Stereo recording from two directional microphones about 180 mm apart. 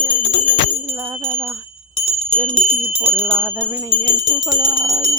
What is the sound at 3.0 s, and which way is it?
Jingle bell, 10° right (ahead or behind).